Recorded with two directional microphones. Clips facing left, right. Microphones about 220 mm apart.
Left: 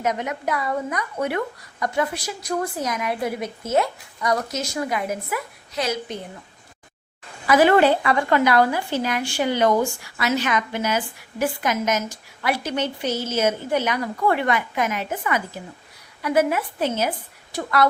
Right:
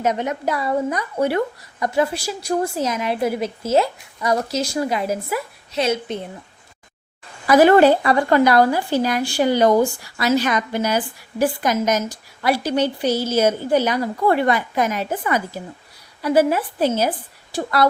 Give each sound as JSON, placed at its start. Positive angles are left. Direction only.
{"t": 0.0, "sound": "a woman's voice", "side_deg": -30}
{"t": 7.4, "sound": "a woman's voice", "side_deg": -40}